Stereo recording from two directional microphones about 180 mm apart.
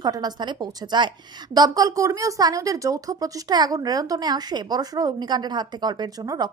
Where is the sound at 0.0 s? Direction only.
20° right (ahead or behind).